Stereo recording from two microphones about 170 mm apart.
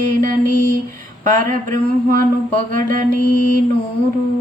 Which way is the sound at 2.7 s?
55° right (ahead or behind).